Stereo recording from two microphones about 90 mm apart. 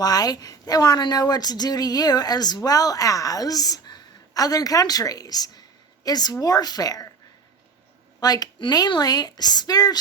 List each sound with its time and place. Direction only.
0.0 s a woman's voice: 45° left (ahead or behind)
8.2 s a woman's voice: 45° left (ahead or behind)